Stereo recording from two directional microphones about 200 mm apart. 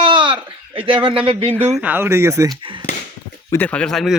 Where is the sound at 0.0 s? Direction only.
25° right (ahead or behind).